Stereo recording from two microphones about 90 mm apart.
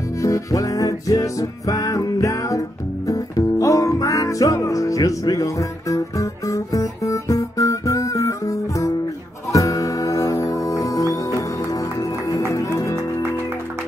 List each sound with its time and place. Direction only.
0.2 s music: 35° left (ahead or behind)